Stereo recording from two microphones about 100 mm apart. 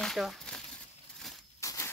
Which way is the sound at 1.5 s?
30° left (ahead or behind).